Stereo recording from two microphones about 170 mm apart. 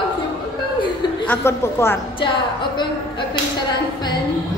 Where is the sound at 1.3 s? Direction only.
15° left (ahead or behind).